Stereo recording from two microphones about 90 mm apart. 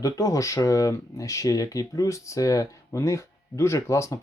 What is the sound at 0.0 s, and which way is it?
Speech, 40° left (ahead or behind).